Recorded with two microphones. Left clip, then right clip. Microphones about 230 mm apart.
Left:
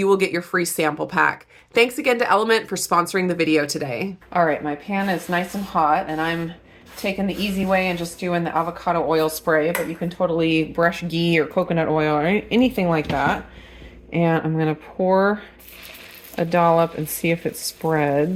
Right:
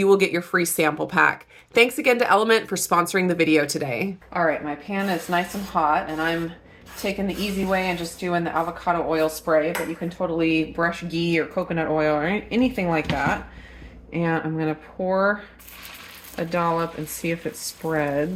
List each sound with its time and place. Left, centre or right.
0.0 s speech: centre
4.3 s speech: left